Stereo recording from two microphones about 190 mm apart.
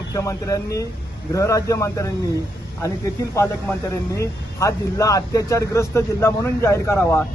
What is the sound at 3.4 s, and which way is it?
A man's voice, 15° left (ahead or behind).